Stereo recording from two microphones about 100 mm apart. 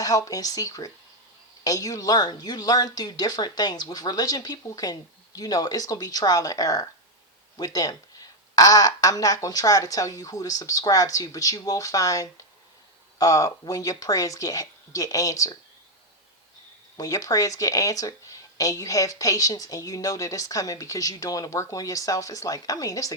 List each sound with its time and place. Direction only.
0.0 s speech: 35° left (ahead or behind)
17.0 s speech: 35° left (ahead or behind)